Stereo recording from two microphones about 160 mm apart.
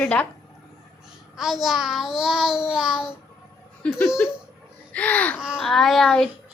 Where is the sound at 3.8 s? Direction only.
5° left (ahead or behind).